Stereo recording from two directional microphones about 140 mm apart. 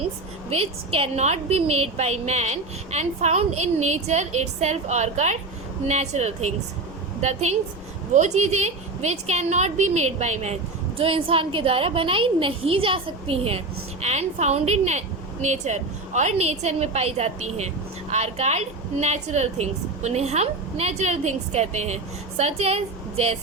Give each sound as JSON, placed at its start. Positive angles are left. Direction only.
{"t": 0.5, "sound": "a woman's voice", "side_deg": -45}